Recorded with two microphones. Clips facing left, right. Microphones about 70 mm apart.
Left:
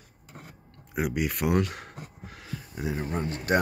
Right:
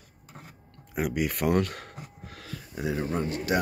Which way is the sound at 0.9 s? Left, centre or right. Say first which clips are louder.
Even; centre.